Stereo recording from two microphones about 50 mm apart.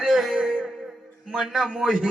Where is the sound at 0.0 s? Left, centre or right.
Centre.